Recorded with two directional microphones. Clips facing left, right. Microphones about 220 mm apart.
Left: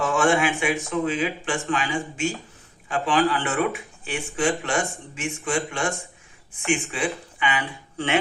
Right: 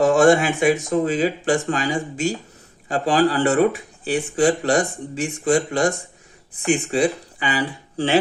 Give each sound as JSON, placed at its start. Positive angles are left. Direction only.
{"t": 0.0, "sound": "speech", "side_deg": -40}